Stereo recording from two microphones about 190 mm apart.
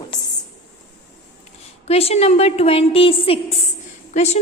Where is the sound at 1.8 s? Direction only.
30° left (ahead or behind).